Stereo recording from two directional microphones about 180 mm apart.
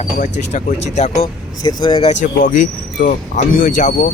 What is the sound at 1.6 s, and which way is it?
Speech, 30° left (ahead or behind).